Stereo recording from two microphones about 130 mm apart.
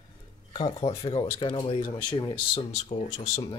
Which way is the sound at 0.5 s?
30° left (ahead or behind).